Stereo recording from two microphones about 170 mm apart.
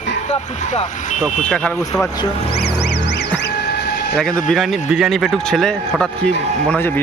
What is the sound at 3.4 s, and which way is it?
Vehicle, 75° left (ahead or behind).